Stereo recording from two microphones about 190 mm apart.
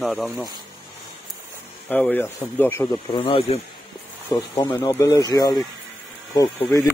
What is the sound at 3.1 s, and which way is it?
Speech, 25° left (ahead or behind).